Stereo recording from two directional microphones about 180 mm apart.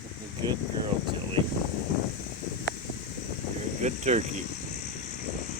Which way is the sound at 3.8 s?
40° right (ahead or behind).